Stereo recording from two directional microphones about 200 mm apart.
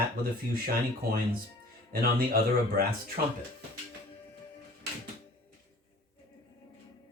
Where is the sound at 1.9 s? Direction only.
45° right (ahead or behind).